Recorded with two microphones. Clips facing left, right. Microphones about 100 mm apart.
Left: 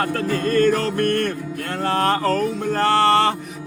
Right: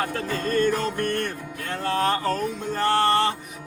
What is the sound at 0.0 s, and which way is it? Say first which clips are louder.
Music: left 5 dB; 55° left (ahead or behind).